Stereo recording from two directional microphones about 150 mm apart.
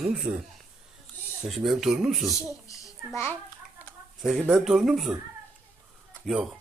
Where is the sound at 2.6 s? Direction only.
20° left (ahead or behind).